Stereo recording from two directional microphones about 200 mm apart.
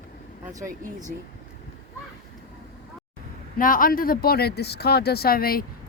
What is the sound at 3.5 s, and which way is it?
A man's voice, 45° left (ahead or behind).